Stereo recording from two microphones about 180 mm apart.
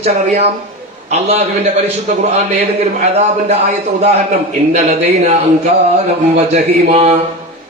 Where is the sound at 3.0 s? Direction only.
35° right (ahead or behind).